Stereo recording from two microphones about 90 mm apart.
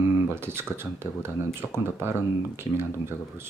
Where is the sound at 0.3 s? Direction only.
25° right (ahead or behind).